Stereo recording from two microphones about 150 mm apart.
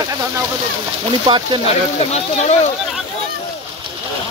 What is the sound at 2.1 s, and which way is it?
Speech, 50° left (ahead or behind).